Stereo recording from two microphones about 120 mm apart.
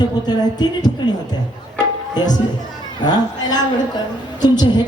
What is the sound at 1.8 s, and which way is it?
Music, 35° left (ahead or behind).